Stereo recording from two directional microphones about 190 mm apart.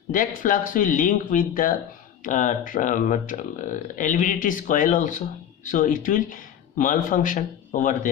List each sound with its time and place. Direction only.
0.1 s speech: 45° left (ahead or behind)